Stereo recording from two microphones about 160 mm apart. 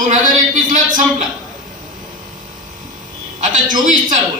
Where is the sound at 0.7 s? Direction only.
55° right (ahead or behind).